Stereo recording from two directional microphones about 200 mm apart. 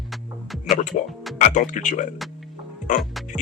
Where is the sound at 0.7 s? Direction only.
40° left (ahead or behind).